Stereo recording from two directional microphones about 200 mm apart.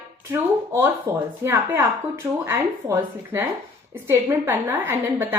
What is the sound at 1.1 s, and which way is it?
A woman's voice, 15° right (ahead or behind).